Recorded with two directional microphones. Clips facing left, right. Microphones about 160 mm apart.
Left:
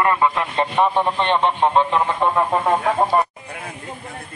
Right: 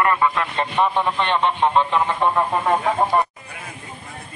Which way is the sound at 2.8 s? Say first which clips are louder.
Left 1 dB; centre (ahead or behind).